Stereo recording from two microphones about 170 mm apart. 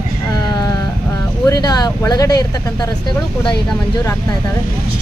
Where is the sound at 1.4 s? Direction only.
25° left (ahead or behind).